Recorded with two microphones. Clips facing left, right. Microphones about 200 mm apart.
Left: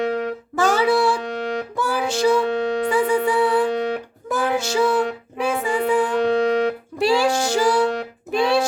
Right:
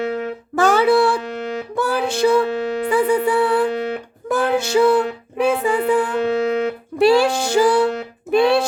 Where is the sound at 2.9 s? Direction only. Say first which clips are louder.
Right 4 dB; 60° right (ahead or behind).